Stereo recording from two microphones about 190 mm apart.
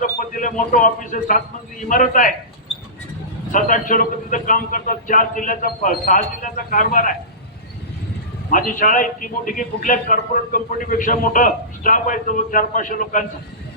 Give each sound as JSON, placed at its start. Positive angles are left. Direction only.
{"t": 0.0, "sound": "a man's voice", "side_deg": 45}
{"t": 3.5, "sound": "a man's voice", "side_deg": 45}
{"t": 8.4, "sound": "a man's voice", "side_deg": 45}